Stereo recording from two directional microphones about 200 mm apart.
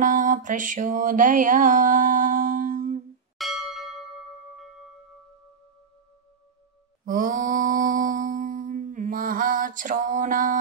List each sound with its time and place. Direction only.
0.0 s mantra: 40° right (ahead or behind)
3.3 s bell: centre (ahead or behind)
7.1 s mantra: 40° right (ahead or behind)